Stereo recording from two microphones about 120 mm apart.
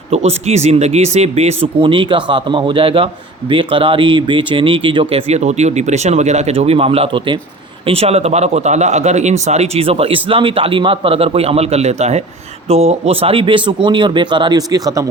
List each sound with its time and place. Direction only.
0.1 s speech: 60° right (ahead or behind); by 5.2 s 45° right (ahead or behind)
5.3 s a man's voice: 70° right (ahead or behind); by 15.0 s 30° right (ahead or behind)